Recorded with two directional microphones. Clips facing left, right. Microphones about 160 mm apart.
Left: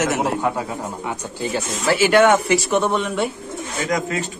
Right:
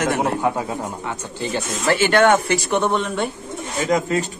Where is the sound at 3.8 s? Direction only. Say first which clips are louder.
Right 4 dB; 30° right (ahead or behind).